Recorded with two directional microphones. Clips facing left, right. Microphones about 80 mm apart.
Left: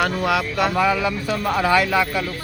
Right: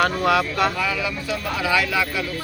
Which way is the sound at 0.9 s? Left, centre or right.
Left.